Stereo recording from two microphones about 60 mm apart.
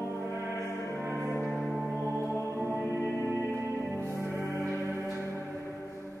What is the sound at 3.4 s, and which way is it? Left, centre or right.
Music, right.